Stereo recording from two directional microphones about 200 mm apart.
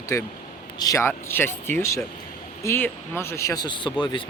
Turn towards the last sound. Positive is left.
turn(degrees=25)  # may be behind; listen again after turning